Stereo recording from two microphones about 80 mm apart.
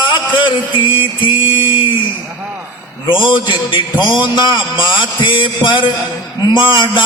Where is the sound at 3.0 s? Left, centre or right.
Left.